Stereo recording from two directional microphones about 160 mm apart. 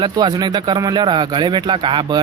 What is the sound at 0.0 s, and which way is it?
Speech, 25° right (ahead or behind).